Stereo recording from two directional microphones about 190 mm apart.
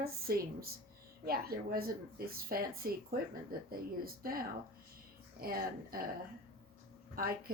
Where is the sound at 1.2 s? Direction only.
55° right (ahead or behind).